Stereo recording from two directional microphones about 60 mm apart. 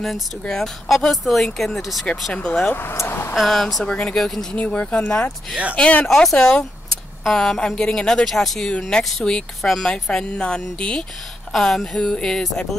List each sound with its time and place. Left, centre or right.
0.0 s speech: centre
2.3 s speech: centre
2.7 s speech: left
3.0 s a sound: left
3.3 s speech: centre
3.8 s speech: centre
4.6 s speech: centre
6.0 s speech: centre